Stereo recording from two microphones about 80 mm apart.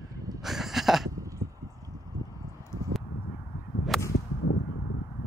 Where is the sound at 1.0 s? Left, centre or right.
Right.